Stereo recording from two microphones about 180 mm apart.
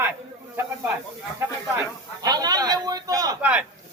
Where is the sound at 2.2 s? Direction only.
20° right (ahead or behind).